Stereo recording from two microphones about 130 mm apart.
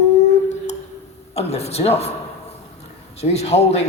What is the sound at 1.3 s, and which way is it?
Speech, 55° left (ahead or behind).